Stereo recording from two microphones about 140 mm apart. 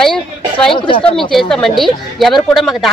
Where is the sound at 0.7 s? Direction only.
35° left (ahead or behind).